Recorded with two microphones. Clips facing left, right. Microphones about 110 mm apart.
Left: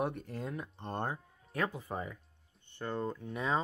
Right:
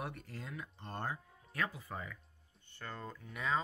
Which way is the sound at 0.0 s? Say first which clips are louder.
Left 9 dB; 25° left (ahead or behind).